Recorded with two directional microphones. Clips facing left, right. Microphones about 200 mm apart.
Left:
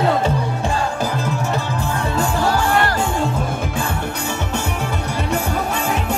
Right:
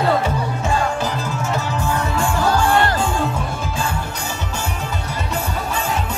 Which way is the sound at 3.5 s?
55° left (ahead or behind).